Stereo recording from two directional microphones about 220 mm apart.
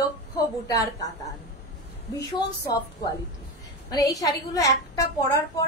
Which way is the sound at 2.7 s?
15° left (ahead or behind).